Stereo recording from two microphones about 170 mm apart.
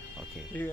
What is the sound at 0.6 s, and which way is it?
Speech, 10° left (ahead or behind).